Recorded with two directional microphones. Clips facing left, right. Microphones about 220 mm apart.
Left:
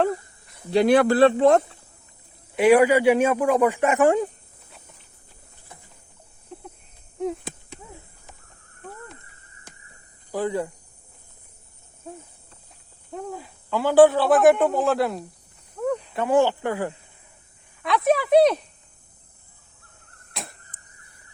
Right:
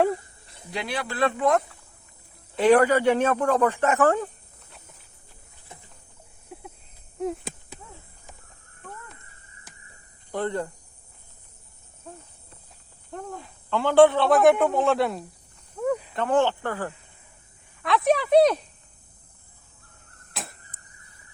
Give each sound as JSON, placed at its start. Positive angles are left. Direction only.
{"t": 0.9, "sound": "speech", "side_deg": 45}
{"t": 1.2, "sound": "speech", "side_deg": 30}
{"t": 2.6, "sound": "speech", "side_deg": 10}
{"t": 6.5, "sound": "a sound", "side_deg": -10}
{"t": 10.3, "sound": "speech", "side_deg": 5}
{"t": 13.1, "sound": "speech", "side_deg": 5}
{"t": 15.8, "sound": "cricket", "side_deg": -5}
{"t": 16.1, "sound": "speech", "side_deg": 10}
{"t": 17.8, "sound": "speech", "side_deg": 0}
{"t": 20.3, "sound": "a sound", "side_deg": 0}